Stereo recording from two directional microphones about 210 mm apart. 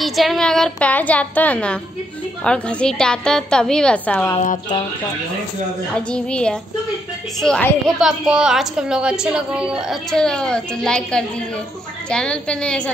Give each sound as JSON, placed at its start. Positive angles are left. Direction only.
{"t": 0.0, "sound": "a woman's voice", "side_deg": 0}
{"t": 5.9, "sound": "a woman's voice", "side_deg": 5}